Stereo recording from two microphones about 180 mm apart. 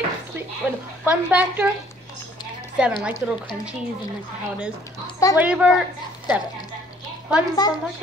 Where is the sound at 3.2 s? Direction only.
5° right (ahead or behind).